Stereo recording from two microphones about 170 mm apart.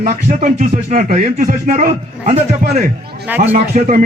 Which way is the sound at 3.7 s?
50° right (ahead or behind).